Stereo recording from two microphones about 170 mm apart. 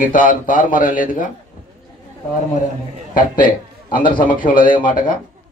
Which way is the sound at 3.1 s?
55° left (ahead or behind).